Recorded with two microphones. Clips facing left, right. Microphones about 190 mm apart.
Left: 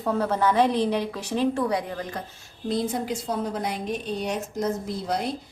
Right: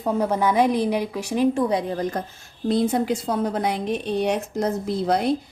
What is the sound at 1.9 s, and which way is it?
Speech, 40° right (ahead or behind).